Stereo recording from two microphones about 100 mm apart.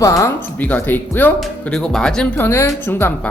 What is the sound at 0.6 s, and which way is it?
Speech, 15° left (ahead or behind).